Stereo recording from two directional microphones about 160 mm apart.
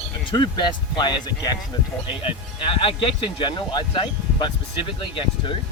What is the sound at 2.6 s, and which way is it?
Speech, 35° left (ahead or behind).